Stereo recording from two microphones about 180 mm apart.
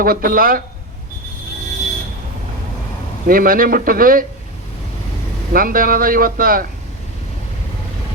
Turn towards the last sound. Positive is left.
turn(degrees=-55)  # may be behind; listen again after turning